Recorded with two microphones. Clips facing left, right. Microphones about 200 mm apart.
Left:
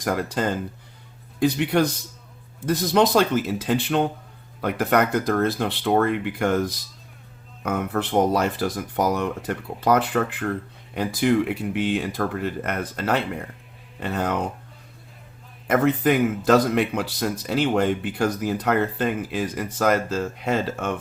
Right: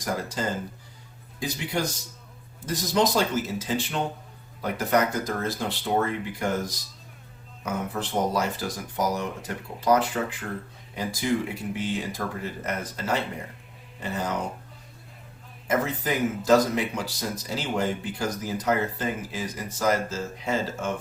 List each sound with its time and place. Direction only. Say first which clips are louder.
0.0 s speech: left 5 dB; 60° left (ahead or behind)
15.6 s speech: left 7 dB; 60° left (ahead or behind)